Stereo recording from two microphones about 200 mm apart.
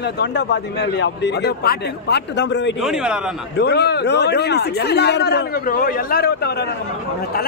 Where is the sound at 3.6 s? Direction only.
55° left (ahead or behind).